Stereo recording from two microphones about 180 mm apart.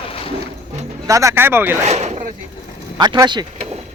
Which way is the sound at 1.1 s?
15° right (ahead or behind).